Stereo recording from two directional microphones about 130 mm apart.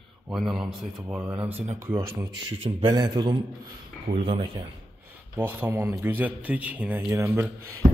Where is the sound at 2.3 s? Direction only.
30° right (ahead or behind).